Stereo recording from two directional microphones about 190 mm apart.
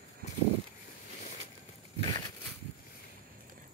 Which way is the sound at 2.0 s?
25° left (ahead or behind).